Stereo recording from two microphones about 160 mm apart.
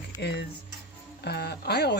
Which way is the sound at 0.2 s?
90° left.